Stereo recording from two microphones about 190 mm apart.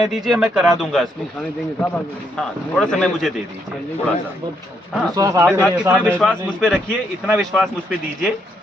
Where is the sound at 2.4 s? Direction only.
5° left (ahead or behind).